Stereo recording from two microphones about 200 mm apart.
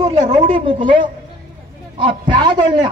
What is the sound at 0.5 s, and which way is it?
A man's voice, 25° right (ahead or behind).